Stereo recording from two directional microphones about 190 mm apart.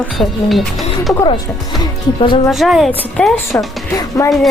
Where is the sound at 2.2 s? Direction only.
25° left (ahead or behind).